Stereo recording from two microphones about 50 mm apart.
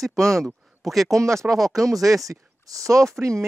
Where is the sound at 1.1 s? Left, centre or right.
Right.